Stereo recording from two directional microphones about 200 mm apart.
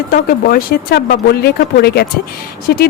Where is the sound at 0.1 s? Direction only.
45° left (ahead or behind).